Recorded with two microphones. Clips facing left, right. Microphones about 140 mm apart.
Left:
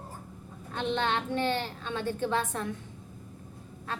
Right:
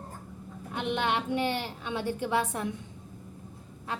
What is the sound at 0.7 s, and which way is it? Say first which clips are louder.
A woman's voice: even; 15° right (ahead or behind).